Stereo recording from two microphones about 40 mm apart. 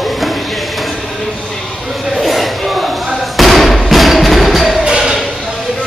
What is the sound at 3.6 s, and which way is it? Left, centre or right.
Music, centre.